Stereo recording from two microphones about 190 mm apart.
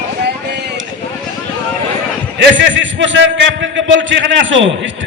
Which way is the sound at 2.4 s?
75° right (ahead or behind).